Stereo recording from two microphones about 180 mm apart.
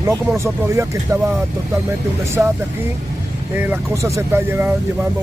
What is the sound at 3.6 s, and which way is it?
Speech, 15° right (ahead or behind).